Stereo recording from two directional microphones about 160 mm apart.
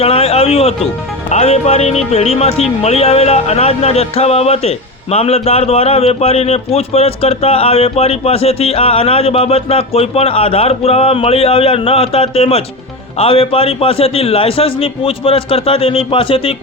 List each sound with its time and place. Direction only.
0.0 s a man's voice: 35° left (ahead or behind)